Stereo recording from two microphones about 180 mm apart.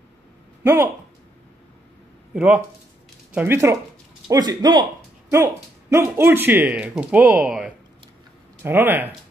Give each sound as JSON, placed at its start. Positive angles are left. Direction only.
{"t": 2.3, "sound": "a man's voice", "side_deg": -5}